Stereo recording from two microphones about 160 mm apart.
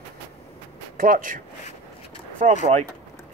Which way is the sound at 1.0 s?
60° right (ahead or behind).